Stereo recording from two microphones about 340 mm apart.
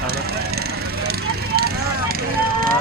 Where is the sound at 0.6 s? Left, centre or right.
Right.